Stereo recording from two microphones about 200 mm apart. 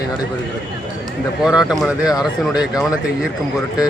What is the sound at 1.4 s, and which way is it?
Speech, 5° right (ahead or behind).